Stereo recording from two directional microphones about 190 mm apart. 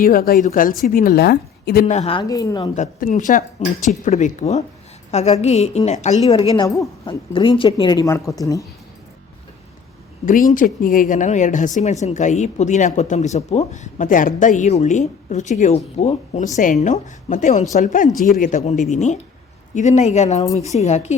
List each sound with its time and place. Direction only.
0.0 s a woman's voice: 50° left (ahead or behind)
1.9 s speech: 30° left (ahead or behind)
2.2 s speech: 20° left (ahead or behind)
2.7 s a woman's voice: 40° left (ahead or behind)
6.5 s speech: 15° left (ahead or behind)
10.2 s speech: 45° left (ahead or behind)